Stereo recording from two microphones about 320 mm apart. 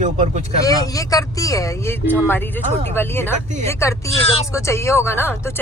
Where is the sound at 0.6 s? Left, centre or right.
Centre.